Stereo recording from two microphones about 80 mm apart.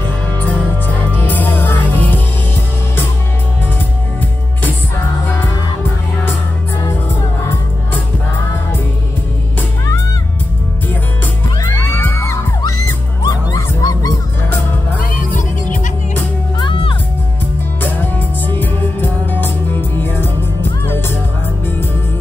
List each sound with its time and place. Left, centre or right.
0.8 s music: left
11.7 s music: left
13.2 s music: left
16.5 s music: left
18.6 s music: left